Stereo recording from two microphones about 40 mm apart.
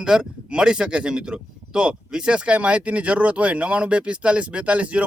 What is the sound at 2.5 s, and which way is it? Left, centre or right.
Speech, right.